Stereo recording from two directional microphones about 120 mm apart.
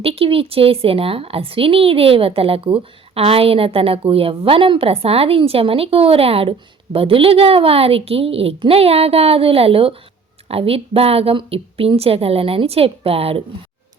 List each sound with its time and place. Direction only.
0.0 s a woman's voice: 50° right (ahead or behind)